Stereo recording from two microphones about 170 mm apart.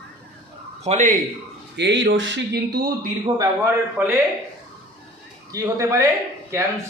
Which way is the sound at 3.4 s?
15° right (ahead or behind).